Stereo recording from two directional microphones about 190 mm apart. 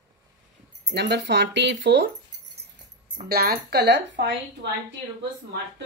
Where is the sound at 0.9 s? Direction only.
60° right (ahead or behind).